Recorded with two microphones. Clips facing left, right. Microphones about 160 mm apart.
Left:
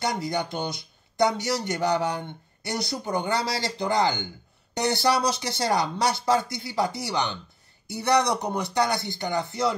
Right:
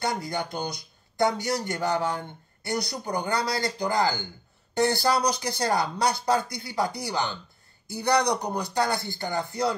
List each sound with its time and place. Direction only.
0.0 s speech: 20° left (ahead or behind)